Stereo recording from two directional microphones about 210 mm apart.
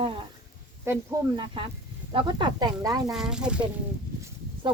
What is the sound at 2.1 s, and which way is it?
Speech, 20° right (ahead or behind).